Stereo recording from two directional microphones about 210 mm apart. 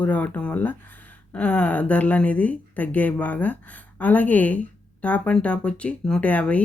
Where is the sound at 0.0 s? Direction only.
5° left (ahead or behind).